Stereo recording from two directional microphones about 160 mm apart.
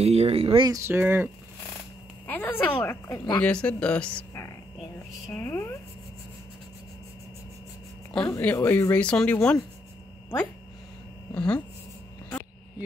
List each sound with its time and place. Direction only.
0.0 s speech: 40° right (ahead or behind)
0.7 s speech: 15° right (ahead or behind)
2.2 s a sound: 10° left (ahead or behind)
3.3 s speech: 5° left (ahead or behind)
8.3 s speech: 15° left (ahead or behind)
11.3 s speech: 5° left (ahead or behind)